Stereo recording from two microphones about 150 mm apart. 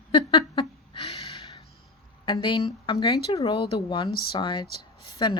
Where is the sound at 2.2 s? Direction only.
30° left (ahead or behind).